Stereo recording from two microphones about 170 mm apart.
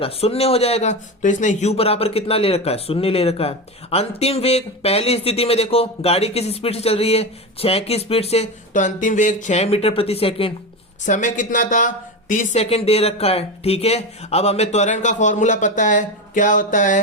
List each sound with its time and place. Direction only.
0.0 s speech: 35° left (ahead or behind)
11.0 s speech: 45° left (ahead or behind)
12.6 s speech: 35° left (ahead or behind)